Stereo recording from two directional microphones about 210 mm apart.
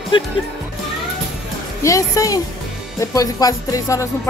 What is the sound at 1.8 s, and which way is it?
Speech, 15° left (ahead or behind).